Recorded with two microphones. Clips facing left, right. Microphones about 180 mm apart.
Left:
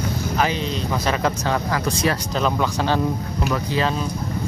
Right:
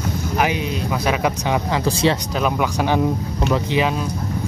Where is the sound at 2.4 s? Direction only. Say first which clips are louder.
Right 1 dB; 15° right (ahead or behind).